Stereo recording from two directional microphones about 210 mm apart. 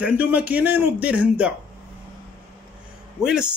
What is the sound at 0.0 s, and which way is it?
Speech, 5° right (ahead or behind).